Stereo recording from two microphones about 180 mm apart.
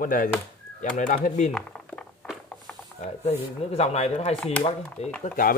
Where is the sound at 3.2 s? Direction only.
35° left (ahead or behind).